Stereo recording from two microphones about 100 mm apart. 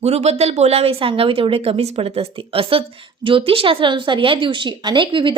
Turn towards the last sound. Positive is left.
turn(degrees=-55)  # may be behind; listen again after turning